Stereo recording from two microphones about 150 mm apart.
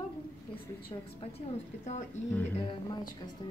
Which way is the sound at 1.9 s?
50° left (ahead or behind).